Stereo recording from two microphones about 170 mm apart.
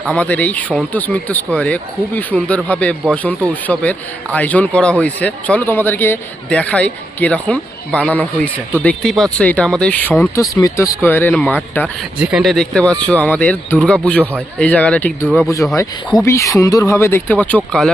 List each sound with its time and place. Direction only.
0.0 s speech: 5° left (ahead or behind)
10.4 s speech: 20° left (ahead or behind)
12.2 s speech: 5° right (ahead or behind)
15.4 s speech: 20° left (ahead or behind)